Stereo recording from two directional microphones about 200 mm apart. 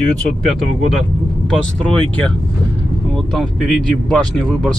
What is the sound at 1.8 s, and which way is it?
Speech, 5° left (ahead or behind).